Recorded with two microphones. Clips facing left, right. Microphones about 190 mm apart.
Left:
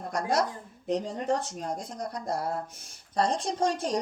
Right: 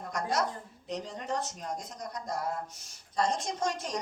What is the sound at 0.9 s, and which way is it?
Speech, 50° left (ahead or behind).